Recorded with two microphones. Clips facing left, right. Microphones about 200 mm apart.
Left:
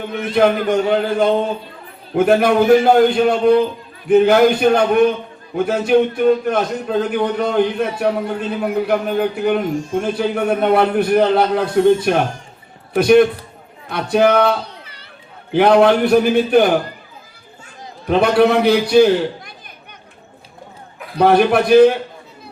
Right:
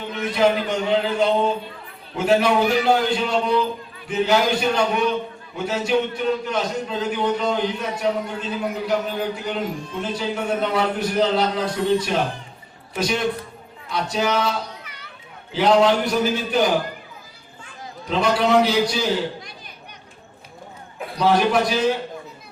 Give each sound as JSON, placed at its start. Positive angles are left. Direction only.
{"t": 0.0, "sound": "a man's voice", "side_deg": 55}
{"t": 14.6, "sound": "children playing", "side_deg": 30}
{"t": 15.5, "sound": "a man's voice", "side_deg": 60}
{"t": 18.1, "sound": "a man's voice", "side_deg": 60}
{"t": 21.2, "sound": "a man's voice", "side_deg": 60}